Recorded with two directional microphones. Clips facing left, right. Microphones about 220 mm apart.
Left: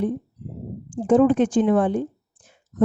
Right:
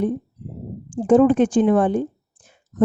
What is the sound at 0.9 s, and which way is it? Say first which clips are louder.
A woman's voice: right 2 dB; 45° right (ahead or behind).